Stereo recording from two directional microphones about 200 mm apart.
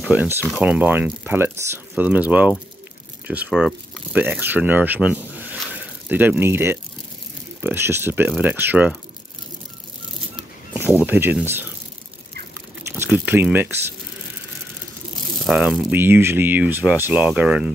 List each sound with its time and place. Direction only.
0.0 s speech: 5° right (ahead or behind)
10.3 s a sound: 10° right (ahead or behind)
12.9 s speech: 10° right (ahead or behind)
15.4 s speech: centre (ahead or behind)